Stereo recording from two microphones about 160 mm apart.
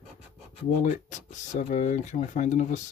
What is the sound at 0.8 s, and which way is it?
Speech, 50° left (ahead or behind).